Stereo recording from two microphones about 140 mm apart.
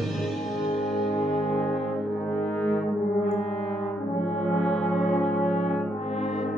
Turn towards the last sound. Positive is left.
turn(degrees=55)  # may be behind; listen again after turning